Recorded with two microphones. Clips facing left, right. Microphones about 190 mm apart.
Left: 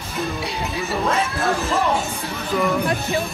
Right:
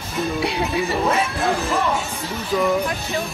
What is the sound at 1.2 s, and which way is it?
Speech, 15° right (ahead or behind).